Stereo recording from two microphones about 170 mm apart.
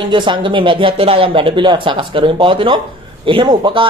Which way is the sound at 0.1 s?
30° right (ahead or behind).